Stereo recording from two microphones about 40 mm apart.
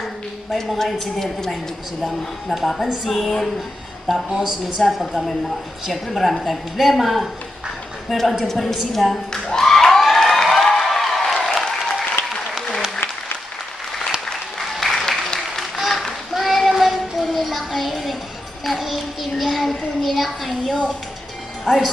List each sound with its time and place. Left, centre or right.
0.7 s a woman's voice: centre
4.3 s speech: centre
4.7 s a woman's voice: centre
9.5 s a sound: centre
14.8 s applause: centre
15.8 s child singing: centre
21.7 s a woman's voice: centre